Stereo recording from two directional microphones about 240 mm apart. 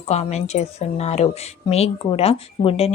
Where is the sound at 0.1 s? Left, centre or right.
Left.